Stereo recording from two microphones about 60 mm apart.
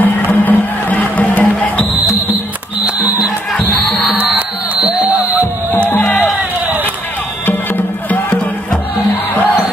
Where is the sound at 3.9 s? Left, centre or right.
Centre.